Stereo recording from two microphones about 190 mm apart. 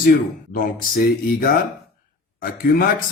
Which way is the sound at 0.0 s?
50° left (ahead or behind).